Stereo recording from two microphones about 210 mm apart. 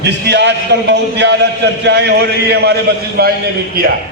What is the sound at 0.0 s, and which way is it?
A man's voice, 55° right (ahead or behind).